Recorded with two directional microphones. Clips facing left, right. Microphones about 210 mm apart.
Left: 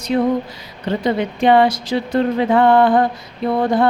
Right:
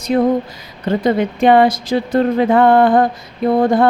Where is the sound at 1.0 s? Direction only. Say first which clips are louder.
Right 3 dB; 50° right (ahead or behind).